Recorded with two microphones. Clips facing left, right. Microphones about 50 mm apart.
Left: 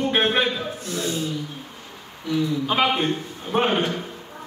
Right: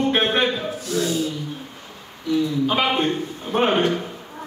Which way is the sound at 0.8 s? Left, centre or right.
Left.